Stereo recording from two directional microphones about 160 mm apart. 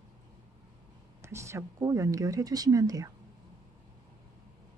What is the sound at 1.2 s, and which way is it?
Speech, 15° right (ahead or behind).